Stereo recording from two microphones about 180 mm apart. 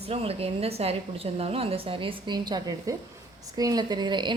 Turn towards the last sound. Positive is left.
turn(degrees=-25)  # may be behind; listen again after turning